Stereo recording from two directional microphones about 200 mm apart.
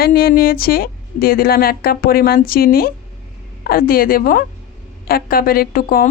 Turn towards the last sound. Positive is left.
turn(degrees=45)  # may be behind; listen again after turning